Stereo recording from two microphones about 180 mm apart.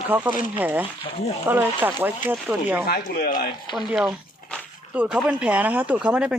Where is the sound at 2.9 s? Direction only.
55° left (ahead or behind).